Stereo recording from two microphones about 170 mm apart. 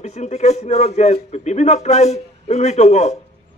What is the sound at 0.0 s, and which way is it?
A man's voice, 40° left (ahead or behind).